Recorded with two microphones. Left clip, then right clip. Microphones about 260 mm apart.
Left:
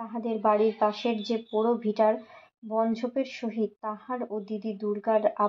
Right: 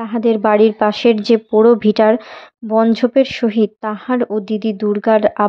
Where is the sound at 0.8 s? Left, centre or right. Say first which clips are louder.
Right 13 dB; right.